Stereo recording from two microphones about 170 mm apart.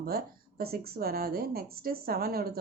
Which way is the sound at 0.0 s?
65° right (ahead or behind).